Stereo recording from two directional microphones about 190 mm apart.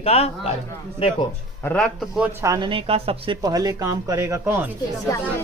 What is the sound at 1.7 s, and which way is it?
Speech, 5° left (ahead or behind).